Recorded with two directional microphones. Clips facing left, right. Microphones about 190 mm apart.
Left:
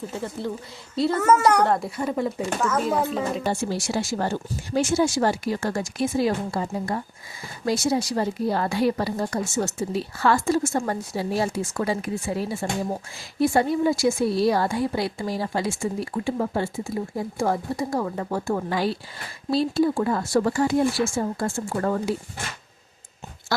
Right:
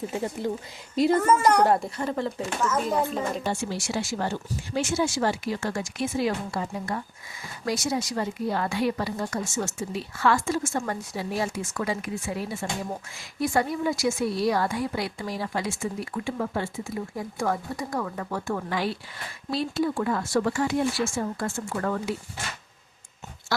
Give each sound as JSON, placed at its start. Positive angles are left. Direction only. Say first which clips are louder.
{"t": 0.1, "sound": "a child's voice", "louder": "right 1 dB", "side_deg": -15}
{"t": 1.8, "sound": "speech", "louder": "left 3 dB", "side_deg": 10}
{"t": 2.6, "sound": "speech", "louder": "left 1 dB", "side_deg": 0}
{"t": 3.4, "sound": "speech", "louder": "left 3 dB", "side_deg": 40}